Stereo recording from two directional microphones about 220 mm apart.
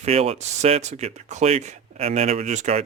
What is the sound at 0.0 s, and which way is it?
Speech, 25° right (ahead or behind).